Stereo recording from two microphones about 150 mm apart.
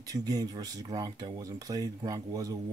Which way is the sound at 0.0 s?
25° right (ahead or behind).